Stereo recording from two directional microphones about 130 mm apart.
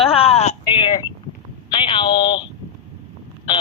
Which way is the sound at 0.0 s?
50° left (ahead or behind).